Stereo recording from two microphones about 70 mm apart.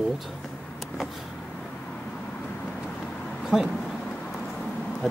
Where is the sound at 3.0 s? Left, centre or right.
Centre.